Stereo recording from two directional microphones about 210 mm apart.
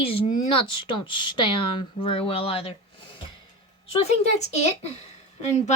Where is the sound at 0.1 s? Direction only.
25° left (ahead or behind).